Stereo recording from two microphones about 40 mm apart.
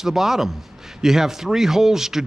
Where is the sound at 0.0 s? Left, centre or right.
Centre.